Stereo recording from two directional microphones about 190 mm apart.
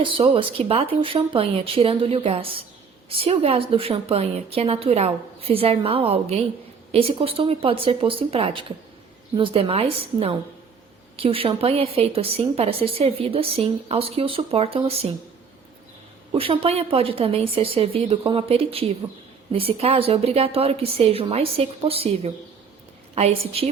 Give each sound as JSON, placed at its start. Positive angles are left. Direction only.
{"t": 0.0, "sound": "a woman's voice", "side_deg": -25}
{"t": 16.3, "sound": "a woman's voice", "side_deg": -30}